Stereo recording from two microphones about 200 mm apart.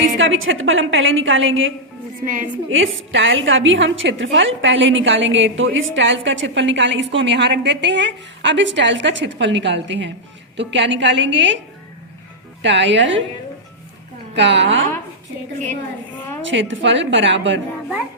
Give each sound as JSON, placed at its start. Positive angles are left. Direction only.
{"t": 0.2, "sound": "a woman's voice", "side_deg": -75}
{"t": 2.2, "sound": "a woman's voice", "side_deg": -40}
{"t": 2.6, "sound": "a woman's voice", "side_deg": -80}
{"t": 12.6, "sound": "a woman's voice", "side_deg": -65}
{"t": 14.3, "sound": "a woman's voice", "side_deg": -60}
{"t": 16.4, "sound": "a woman's voice", "side_deg": -65}